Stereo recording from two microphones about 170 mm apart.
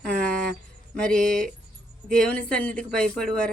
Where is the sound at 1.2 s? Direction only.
55° right (ahead or behind).